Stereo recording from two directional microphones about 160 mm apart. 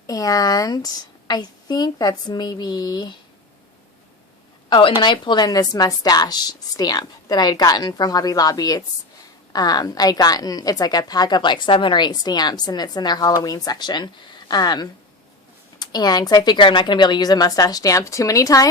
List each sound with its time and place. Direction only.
0.1 s a woman's voice: 25° left (ahead or behind)
4.7 s a woman's voice: 30° left (ahead or behind)